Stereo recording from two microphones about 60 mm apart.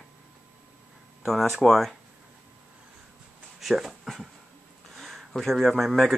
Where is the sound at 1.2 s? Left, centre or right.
Centre.